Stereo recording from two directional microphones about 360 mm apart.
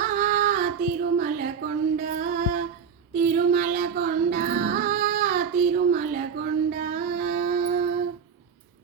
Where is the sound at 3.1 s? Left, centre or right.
Right.